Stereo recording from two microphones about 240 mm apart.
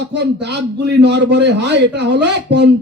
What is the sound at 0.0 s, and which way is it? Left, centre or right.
A man's voice, right.